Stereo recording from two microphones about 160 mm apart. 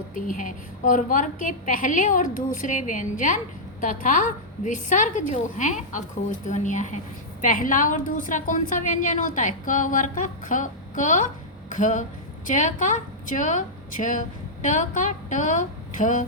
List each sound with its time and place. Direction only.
0.1 s a woman's voice: 55° left (ahead or behind)